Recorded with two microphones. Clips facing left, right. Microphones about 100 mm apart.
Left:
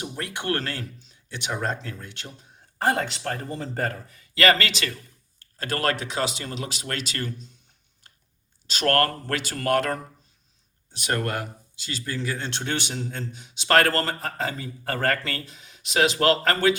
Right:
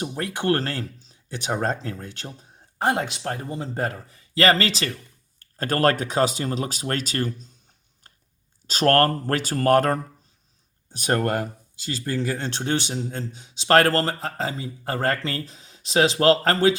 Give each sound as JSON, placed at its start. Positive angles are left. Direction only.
{"t": 0.2, "sound": "speech", "side_deg": -35}
{"t": 2.7, "sound": "speech", "side_deg": -20}
{"t": 3.9, "sound": "speech", "side_deg": -30}
{"t": 8.1, "sound": "a sound", "side_deg": -40}
{"t": 8.6, "sound": "speech", "side_deg": -40}